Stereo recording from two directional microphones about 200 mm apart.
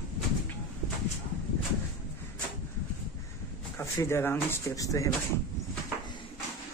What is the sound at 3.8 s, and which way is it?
Speech, 15° left (ahead or behind).